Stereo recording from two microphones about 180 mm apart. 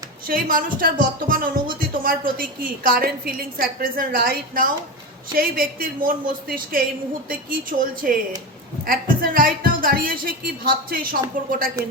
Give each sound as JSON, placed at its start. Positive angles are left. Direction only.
{"t": 0.3, "sound": "a woman's voice", "side_deg": -50}